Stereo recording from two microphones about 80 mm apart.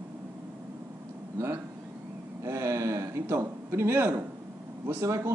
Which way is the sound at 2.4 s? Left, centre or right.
Right.